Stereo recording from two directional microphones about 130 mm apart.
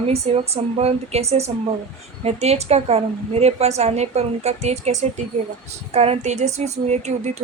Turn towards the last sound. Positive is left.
turn(degrees=-60)  # may be behind; listen again after turning